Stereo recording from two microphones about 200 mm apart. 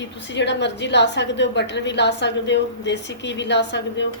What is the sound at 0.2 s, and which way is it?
A woman's voice, 60° left (ahead or behind).